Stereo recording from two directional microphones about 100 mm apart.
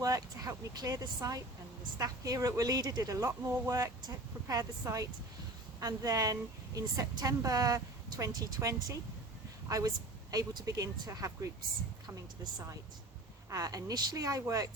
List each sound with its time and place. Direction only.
0.0 s a woman's voice: 35° right (ahead or behind)
13.5 s a woman's voice: 35° right (ahead or behind)